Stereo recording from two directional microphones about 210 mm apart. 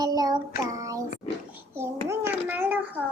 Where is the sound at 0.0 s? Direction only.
20° right (ahead or behind).